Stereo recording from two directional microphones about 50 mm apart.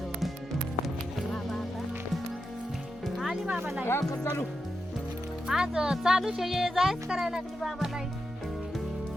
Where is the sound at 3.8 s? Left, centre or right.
Left.